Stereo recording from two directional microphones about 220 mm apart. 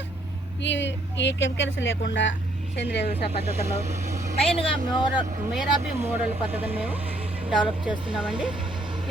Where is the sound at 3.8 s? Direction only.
30° right (ahead or behind).